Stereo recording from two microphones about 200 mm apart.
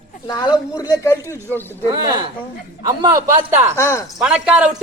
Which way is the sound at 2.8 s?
20° right (ahead or behind).